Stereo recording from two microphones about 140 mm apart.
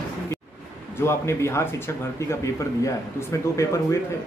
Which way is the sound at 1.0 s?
20° left (ahead or behind).